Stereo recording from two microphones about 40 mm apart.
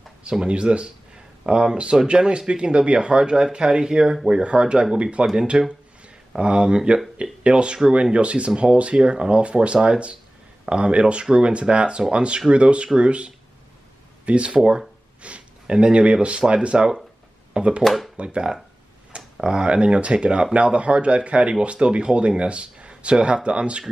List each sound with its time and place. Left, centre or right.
0.5 s speech: right
5.2 s speech: centre
6.3 s speech: right
17.8 s speech: centre
18.1 s speech: right